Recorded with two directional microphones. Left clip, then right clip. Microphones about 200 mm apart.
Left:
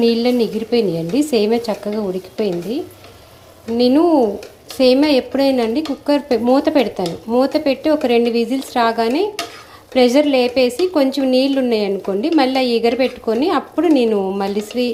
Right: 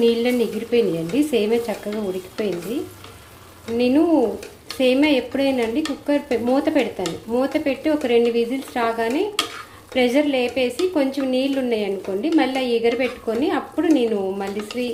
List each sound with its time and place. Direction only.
0.0 s a woman's voice: 25° left (ahead or behind)
3.8 s a woman's voice: 25° left (ahead or behind)